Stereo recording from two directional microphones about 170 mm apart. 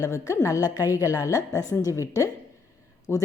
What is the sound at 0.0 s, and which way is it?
A woman's voice, 15° left (ahead or behind).